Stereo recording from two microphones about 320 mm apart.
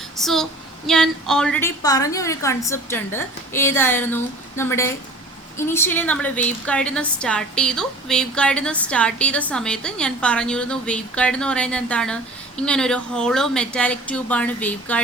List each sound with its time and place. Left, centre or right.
0.2 s a woman's voice: centre